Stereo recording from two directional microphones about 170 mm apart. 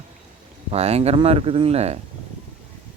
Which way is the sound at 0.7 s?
40° right (ahead or behind).